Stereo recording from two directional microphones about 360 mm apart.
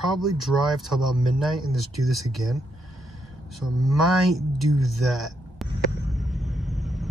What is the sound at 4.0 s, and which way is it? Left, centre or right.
Speech, centre.